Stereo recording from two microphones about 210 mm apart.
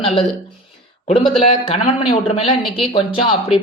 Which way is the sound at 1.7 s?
30° left (ahead or behind).